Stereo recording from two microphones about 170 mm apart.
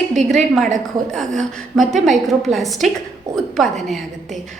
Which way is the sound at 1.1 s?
Centre (ahead or behind).